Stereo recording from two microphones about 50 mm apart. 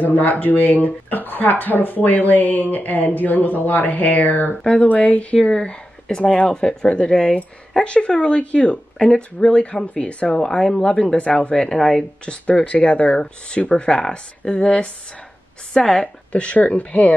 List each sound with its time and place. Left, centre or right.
0.0 s speech: left
5.5 s speech: centre
11.5 s speech: centre
11.8 s speech: left
16.3 s speech: left